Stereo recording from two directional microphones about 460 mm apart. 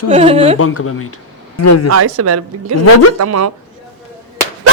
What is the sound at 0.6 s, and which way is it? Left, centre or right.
Speech, left.